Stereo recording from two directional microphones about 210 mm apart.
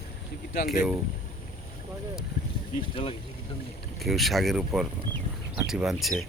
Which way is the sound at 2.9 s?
25° left (ahead or behind).